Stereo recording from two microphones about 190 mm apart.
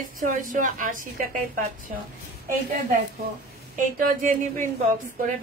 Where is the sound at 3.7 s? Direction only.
45° right (ahead or behind).